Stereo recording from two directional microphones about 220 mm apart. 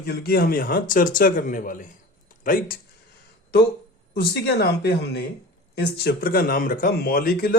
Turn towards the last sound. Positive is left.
turn(degrees=40)  # may be behind; listen again after turning